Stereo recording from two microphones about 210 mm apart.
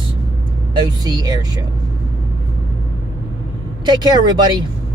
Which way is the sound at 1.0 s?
20° right (ahead or behind).